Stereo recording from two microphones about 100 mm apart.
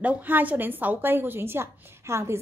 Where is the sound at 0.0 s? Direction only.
15° right (ahead or behind).